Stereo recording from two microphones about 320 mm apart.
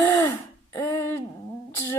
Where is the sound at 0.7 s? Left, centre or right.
Centre.